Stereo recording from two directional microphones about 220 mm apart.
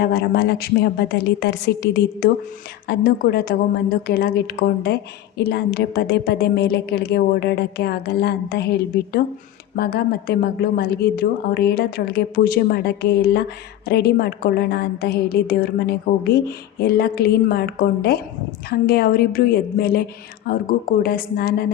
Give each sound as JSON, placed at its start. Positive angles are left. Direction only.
{"t": 0.0, "sound": "a woman's voice", "side_deg": 45}
{"t": 9.7, "sound": "a woman's voice", "side_deg": 45}